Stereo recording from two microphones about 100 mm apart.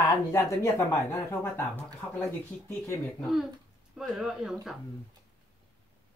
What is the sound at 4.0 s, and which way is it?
Speech, 5° right (ahead or behind).